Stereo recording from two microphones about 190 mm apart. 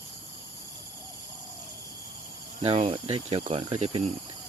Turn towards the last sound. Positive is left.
turn(degrees=-30)  # may be behind; listen again after turning